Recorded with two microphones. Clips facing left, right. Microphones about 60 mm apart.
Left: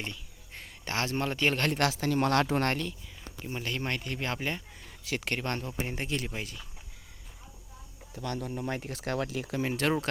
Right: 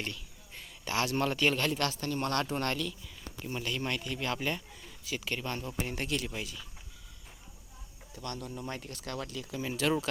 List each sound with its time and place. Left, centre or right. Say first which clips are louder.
0.5 s a sound: even; left
1.1 s speech: even; left
1.5 s speech: left 2 dB; left
1.8 s speech: left 5 dB; left
3.6 s speech: left 1 dB; left
5.0 s speech: left 3 dB; left
5.7 s speech: left 1 dB; left
8.1 s speech: left 5 dB; left
9.6 s speech: left 2 dB; left